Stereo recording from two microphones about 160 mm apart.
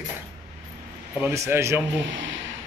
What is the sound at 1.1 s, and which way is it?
Speech, 15° right (ahead or behind).